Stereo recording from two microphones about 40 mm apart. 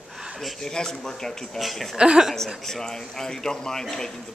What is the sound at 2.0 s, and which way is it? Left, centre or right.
Speech, right.